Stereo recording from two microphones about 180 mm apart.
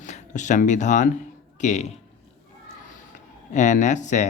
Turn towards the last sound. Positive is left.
turn(degrees=40)  # may be behind; listen again after turning